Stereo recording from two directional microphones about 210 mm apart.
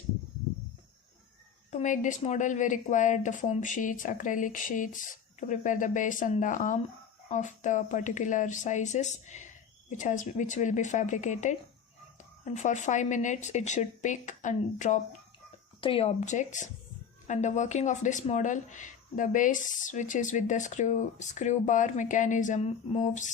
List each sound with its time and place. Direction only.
1.7 s speech: 35° left (ahead or behind)